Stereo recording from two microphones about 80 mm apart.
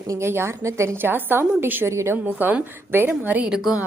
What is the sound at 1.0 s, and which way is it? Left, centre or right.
A woman's voice, right.